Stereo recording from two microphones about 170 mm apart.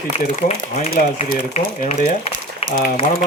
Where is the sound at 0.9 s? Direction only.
50° left (ahead or behind).